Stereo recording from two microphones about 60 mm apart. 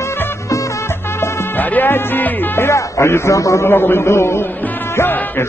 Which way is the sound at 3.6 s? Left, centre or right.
Left.